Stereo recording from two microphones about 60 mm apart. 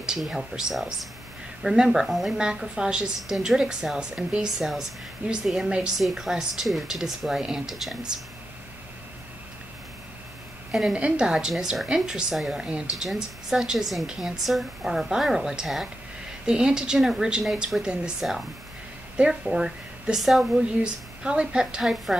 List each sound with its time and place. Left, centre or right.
0.2 s a woman's voice: centre
10.7 s a woman's voice: centre
18.2 s a woman's voice: centre
20.8 s a woman's voice: centre